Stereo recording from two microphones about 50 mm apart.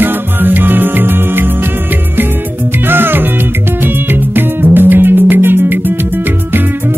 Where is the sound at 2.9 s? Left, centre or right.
Right.